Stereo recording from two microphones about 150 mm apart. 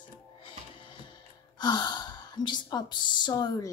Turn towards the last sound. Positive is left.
turn(degrees=25)  # may be behind; listen again after turning